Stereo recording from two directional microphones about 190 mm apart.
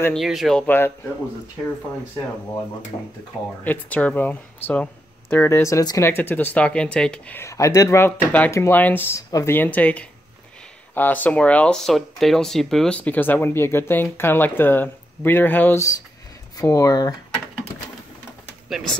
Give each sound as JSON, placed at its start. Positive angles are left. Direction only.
{"t": 0.0, "sound": "speech", "side_deg": 0}
{"t": 2.9, "sound": "speech", "side_deg": 25}
{"t": 3.6, "sound": "speech", "side_deg": 10}